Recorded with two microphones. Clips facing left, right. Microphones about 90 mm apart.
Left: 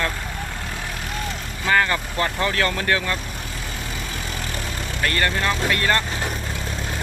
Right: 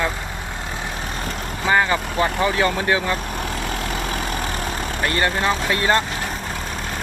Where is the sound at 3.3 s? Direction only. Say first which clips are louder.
Right 7 dB; 65° right (ahead or behind); by 5.0 s 50° right (ahead or behind).